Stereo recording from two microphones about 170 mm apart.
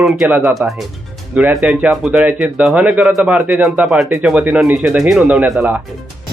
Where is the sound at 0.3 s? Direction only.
10° right (ahead or behind).